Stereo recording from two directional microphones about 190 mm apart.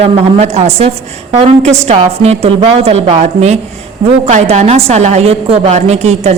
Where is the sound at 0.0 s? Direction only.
35° right (ahead or behind).